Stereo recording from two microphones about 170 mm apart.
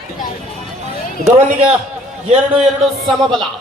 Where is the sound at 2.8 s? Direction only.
Centre (ahead or behind).